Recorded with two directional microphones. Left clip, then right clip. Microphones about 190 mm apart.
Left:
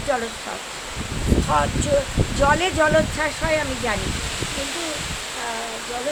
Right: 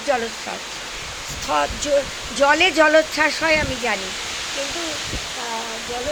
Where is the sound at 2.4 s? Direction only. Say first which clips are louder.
Right 4 dB; 10° right (ahead or behind).